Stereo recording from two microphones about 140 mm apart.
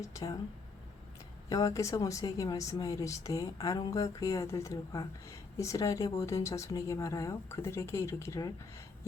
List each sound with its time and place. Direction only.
0.0 s speech: 25° left (ahead or behind)
1.5 s speech: 25° left (ahead or behind)